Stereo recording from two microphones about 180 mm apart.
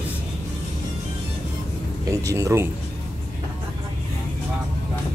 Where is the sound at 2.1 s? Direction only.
15° right (ahead or behind).